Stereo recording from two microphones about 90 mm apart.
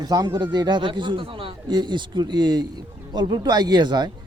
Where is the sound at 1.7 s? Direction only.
55° right (ahead or behind).